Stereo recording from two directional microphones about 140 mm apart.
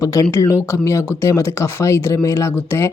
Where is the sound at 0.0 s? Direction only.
25° left (ahead or behind).